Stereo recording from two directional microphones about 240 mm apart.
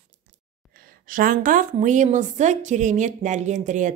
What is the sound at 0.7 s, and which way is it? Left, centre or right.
A woman's voice, right.